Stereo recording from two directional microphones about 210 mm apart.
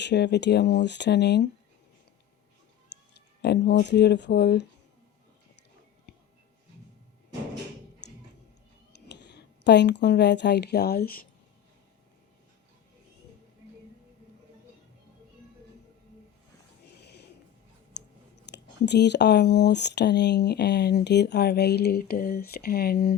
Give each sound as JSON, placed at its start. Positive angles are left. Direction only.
{"t": 0.0, "sound": "speech", "side_deg": 55}
{"t": 2.9, "sound": "speech", "side_deg": 55}
{"t": 9.0, "sound": "speech", "side_deg": 55}
{"t": 16.8, "sound": "a sound", "side_deg": 50}
{"t": 18.5, "sound": "speech", "side_deg": 55}